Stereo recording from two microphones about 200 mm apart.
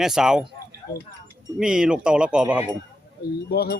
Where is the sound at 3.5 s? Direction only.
50° left (ahead or behind).